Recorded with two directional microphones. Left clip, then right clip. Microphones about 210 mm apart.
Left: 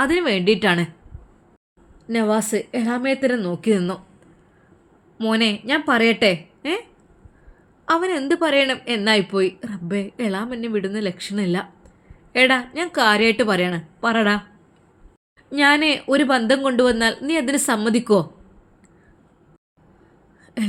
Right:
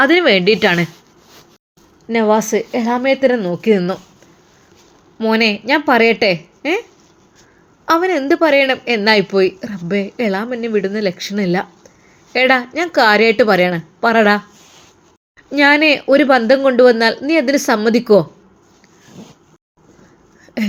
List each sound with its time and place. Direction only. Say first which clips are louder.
0.0 s a man's voice: right 8 dB; 5° right (ahead or behind)
2.0 s a man's voice: right 7 dB; centre (ahead or behind)
5.8 s a man's voice: right 4 dB; 5° right (ahead or behind)
7.9 s a man's voice: right 6 dB; 5° right (ahead or behind)
15.4 s a man's voice: right 6 dB; 5° right (ahead or behind)